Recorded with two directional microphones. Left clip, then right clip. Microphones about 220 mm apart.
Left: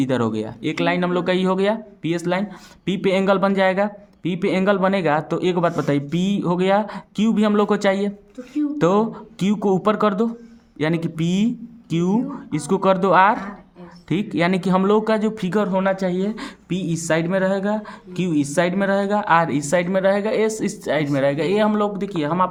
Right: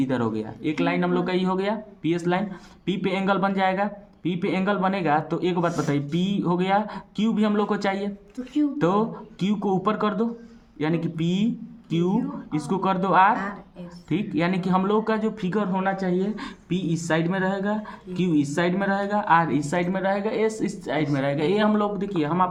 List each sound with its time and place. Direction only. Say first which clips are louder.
0.0 s speech: left 4 dB; 45° left (ahead or behind)